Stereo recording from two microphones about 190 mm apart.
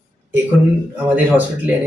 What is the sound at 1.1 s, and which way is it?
Speech, 10° right (ahead or behind).